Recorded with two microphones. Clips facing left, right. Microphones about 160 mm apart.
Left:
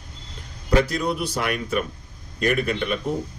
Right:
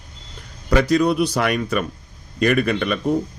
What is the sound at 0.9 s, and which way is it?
Speech, 75° right (ahead or behind).